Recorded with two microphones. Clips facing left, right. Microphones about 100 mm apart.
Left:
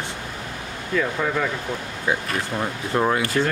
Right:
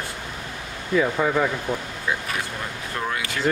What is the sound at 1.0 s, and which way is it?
Speech, 10° right (ahead or behind).